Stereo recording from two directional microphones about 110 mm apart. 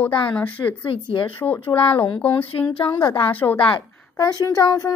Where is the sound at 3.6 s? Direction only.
40° left (ahead or behind).